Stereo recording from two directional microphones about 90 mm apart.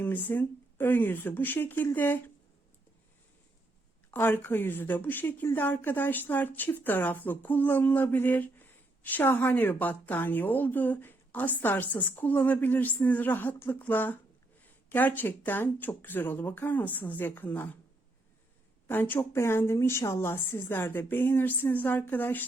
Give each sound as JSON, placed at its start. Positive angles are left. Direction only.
{"t": 0.0, "sound": "a woman's voice", "side_deg": 20}
{"t": 4.1, "sound": "a woman's voice", "side_deg": 20}
{"t": 18.9, "sound": "a woman's voice", "side_deg": 20}